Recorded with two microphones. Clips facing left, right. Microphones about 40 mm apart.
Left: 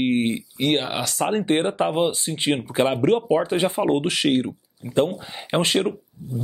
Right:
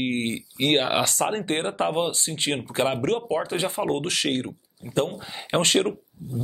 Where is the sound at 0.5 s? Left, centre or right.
Centre.